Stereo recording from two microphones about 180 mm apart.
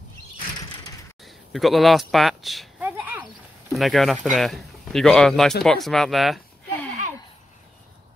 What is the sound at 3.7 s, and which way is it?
Speech, centre (ahead or behind).